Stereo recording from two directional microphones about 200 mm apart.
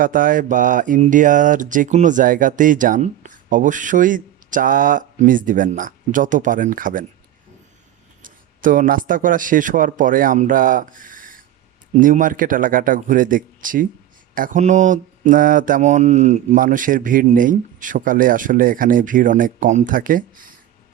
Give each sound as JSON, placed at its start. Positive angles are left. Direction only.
{"t": 0.0, "sound": "speech", "side_deg": -45}
{"t": 8.2, "sound": "a man's voice", "side_deg": -40}